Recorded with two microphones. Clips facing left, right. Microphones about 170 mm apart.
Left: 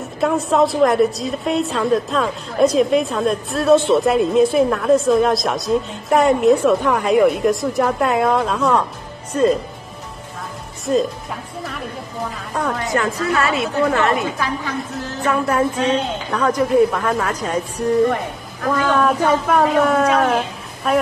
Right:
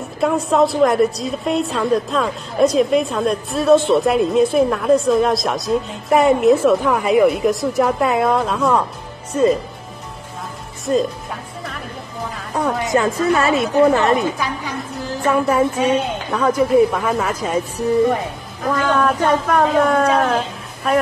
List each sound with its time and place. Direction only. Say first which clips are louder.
0.2 s a woman's voice: right 1 dB; centre (ahead or behind)
10.9 s a woman's voice: even; centre (ahead or behind)
12.5 s a woman's voice: right 3 dB; 20° right (ahead or behind)
15.2 s a woman's voice: right 2 dB; 10° right (ahead or behind)